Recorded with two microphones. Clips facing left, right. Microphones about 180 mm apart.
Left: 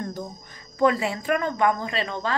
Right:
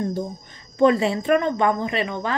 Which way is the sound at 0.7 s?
25° right (ahead or behind).